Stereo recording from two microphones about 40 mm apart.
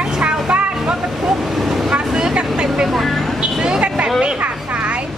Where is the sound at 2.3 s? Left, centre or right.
Right.